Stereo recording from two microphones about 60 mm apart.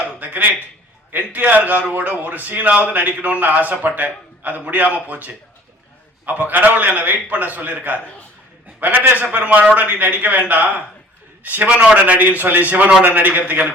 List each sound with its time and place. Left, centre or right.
0.2 s a sound: right
1.1 s a man's voice: right
11.4 s a man's voice: right